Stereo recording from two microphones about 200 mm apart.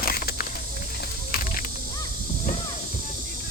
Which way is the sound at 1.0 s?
45° left (ahead or behind).